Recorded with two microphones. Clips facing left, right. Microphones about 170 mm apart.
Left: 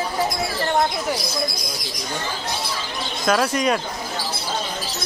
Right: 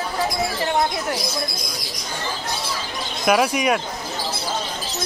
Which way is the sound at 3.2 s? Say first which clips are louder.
Right 1 dB; 10° right (ahead or behind).